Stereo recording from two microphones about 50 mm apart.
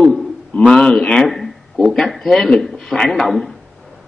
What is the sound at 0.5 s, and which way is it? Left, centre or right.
Speech, centre.